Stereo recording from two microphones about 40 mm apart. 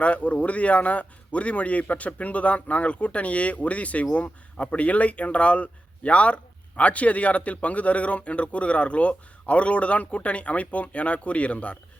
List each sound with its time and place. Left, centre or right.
0.0 s speech: left